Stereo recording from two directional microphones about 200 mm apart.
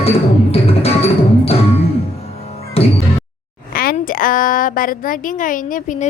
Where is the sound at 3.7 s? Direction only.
45° left (ahead or behind).